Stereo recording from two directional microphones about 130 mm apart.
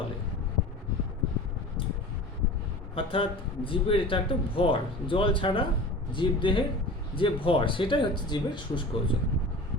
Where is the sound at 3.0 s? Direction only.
45° left (ahead or behind).